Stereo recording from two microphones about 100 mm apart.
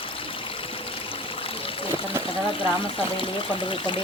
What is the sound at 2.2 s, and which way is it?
Water, 60° left (ahead or behind).